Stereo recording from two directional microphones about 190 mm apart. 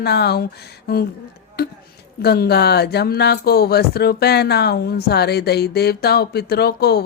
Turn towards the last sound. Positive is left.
turn(degrees=55)  # may be behind; listen again after turning